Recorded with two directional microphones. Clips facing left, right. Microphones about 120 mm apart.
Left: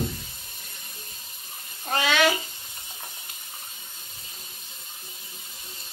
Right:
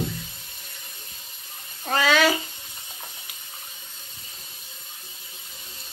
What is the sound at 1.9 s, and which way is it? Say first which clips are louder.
Bathtub: right 2 dB; 40° right (ahead or behind).